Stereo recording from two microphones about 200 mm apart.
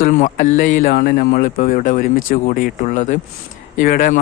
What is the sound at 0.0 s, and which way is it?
Speech, 40° left (ahead or behind).